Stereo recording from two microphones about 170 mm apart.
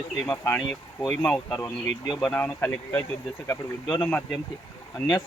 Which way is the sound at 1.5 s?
15° left (ahead or behind).